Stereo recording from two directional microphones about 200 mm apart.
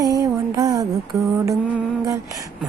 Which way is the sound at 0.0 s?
15° right (ahead or behind).